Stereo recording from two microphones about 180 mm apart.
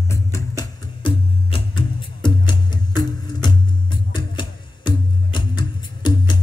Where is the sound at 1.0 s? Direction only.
30° left (ahead or behind).